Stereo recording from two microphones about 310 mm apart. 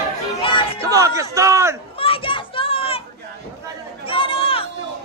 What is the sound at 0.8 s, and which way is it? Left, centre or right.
A man's voice, centre.